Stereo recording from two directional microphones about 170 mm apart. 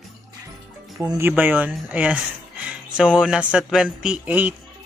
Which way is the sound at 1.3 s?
10° right (ahead or behind).